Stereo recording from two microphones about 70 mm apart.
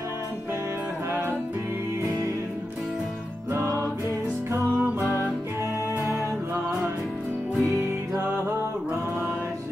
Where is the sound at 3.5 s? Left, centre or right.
Right.